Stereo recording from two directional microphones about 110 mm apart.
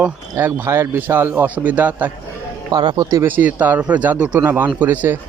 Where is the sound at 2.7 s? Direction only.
40° right (ahead or behind).